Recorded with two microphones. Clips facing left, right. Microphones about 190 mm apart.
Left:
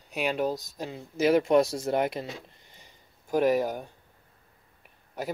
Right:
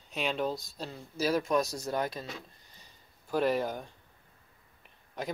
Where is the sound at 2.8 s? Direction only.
15° left (ahead or behind).